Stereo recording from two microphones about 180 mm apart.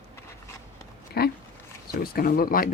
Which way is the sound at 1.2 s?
60° left (ahead or behind).